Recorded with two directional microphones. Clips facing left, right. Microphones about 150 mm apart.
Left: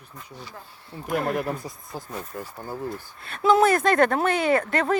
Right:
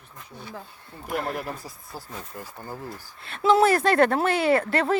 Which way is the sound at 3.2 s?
25° right (ahead or behind).